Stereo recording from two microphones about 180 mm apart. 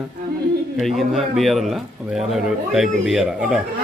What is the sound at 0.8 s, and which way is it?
Speech, centre (ahead or behind).